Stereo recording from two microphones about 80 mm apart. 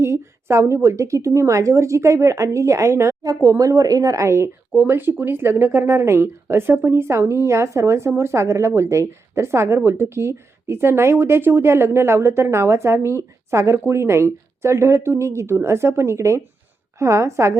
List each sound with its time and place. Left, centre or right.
0.0 s speech: right